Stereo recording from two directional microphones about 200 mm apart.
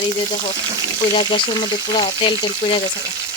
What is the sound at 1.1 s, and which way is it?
Frying, 25° left (ahead or behind).